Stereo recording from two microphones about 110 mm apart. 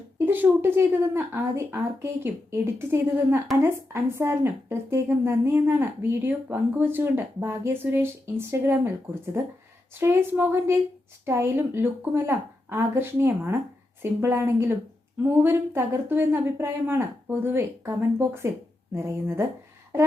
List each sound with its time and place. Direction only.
0.3 s a woman's voice: 20° right (ahead or behind)